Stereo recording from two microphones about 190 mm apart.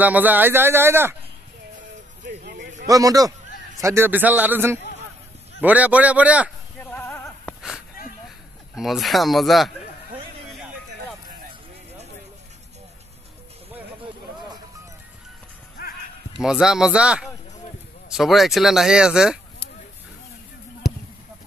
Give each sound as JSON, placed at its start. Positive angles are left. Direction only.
{"t": 0.0, "sound": "speech", "side_deg": -10}
{"t": 1.8, "sound": "music", "side_deg": -50}
{"t": 2.9, "sound": "speech", "side_deg": -20}
{"t": 6.9, "sound": "a sound", "side_deg": 10}
{"t": 8.7, "sound": "speech", "side_deg": 0}
{"t": 15.8, "sound": "music", "side_deg": 50}
{"t": 16.3, "sound": "speech", "side_deg": -5}